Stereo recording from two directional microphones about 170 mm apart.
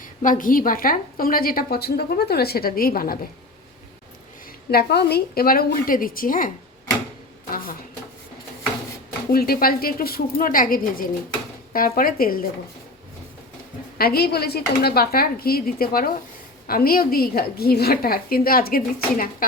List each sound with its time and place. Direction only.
0.0 s a woman's voice: 50° left (ahead or behind)
4.7 s a woman's voice: 70° left (ahead or behind)
9.3 s a woman's voice: 60° left (ahead or behind)
14.0 s a woman's voice: 65° left (ahead or behind)